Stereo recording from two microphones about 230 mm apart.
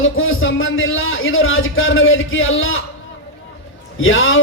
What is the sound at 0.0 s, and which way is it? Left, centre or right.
A man's voice, left.